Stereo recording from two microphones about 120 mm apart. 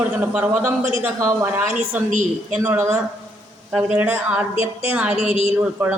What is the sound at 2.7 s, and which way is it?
Speech, 20° right (ahead or behind).